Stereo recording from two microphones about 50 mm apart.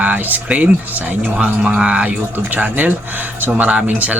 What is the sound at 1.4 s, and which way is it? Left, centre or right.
Speech, centre.